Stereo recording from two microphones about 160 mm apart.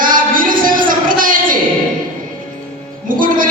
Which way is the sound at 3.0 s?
60° right (ahead or behind).